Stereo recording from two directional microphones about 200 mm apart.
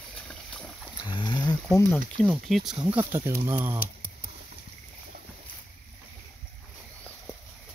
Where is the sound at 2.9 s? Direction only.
10° right (ahead or behind).